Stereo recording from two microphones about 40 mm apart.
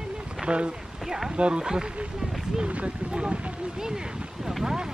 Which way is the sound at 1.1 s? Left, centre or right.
Centre.